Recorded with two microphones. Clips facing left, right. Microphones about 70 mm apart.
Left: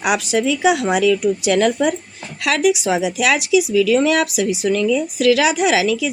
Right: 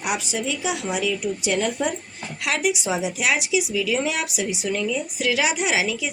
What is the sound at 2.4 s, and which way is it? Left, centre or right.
A woman's voice, left.